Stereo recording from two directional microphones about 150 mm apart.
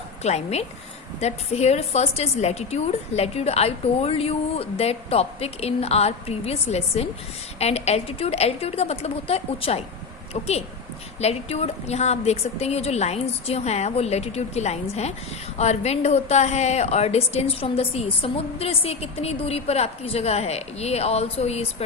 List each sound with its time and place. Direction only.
0.2 s a woman's voice: 45° left (ahead or behind)
11.2 s a woman's voice: 45° left (ahead or behind)